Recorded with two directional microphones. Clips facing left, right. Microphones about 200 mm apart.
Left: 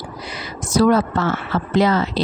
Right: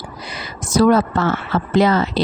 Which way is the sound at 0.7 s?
50° right (ahead or behind).